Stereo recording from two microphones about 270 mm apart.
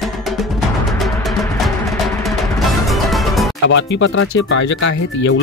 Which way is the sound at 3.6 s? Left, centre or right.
Left.